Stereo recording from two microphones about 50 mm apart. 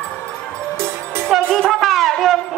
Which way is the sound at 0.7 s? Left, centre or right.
Right.